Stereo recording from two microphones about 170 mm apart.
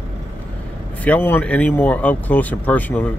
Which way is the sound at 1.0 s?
10° left (ahead or behind).